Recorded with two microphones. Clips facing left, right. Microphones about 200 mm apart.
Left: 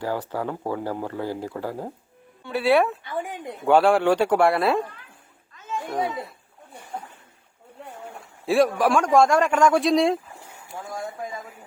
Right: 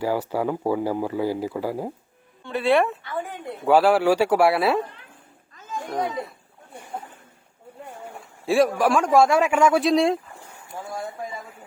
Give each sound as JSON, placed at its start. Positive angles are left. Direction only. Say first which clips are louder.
{"t": 0.0, "sound": "speech", "louder": "right 4 dB", "side_deg": -10}
{"t": 2.4, "sound": "speech", "louder": "even", "side_deg": 5}
{"t": 3.0, "sound": "speech", "louder": "even", "side_deg": 15}
{"t": 3.6, "sound": "a man's voice", "louder": "even", "side_deg": -5}
{"t": 5.8, "sound": "a man's voice", "louder": "right 1 dB", "side_deg": 5}
{"t": 8.2, "sound": "a man's voice", "louder": "even", "side_deg": 0}